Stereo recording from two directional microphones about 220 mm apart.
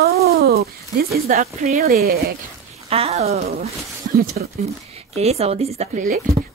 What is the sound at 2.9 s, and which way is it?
Speech, 25° right (ahead or behind).